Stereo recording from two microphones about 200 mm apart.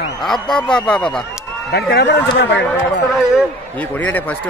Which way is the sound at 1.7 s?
55° left (ahead or behind).